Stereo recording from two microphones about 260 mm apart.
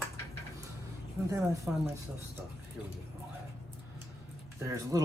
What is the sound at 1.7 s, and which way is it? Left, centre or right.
Speech, centre.